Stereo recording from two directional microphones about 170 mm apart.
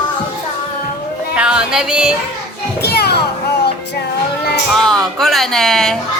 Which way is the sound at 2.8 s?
75° left (ahead or behind).